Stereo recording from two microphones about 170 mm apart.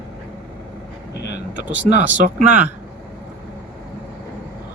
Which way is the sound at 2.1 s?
45° right (ahead or behind).